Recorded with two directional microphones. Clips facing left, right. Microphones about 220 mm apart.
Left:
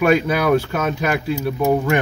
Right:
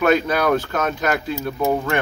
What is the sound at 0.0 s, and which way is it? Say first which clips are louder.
Speech: left 1 dB; 10° left (ahead or behind).